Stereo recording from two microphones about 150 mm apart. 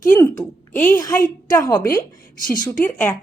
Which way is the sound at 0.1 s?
15° left (ahead or behind).